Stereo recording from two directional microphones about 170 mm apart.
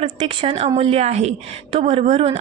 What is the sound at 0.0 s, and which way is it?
A woman's voice, 40° right (ahead or behind).